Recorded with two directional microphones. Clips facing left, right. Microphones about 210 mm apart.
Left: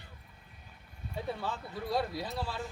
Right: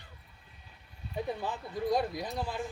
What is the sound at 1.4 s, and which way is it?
Speech, 15° right (ahead or behind).